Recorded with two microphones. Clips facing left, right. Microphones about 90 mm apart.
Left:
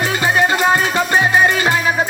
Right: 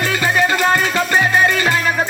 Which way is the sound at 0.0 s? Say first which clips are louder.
Left 1 dB; 10° left (ahead or behind).